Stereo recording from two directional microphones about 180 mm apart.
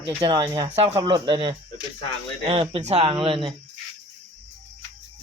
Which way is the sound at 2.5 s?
30° right (ahead or behind).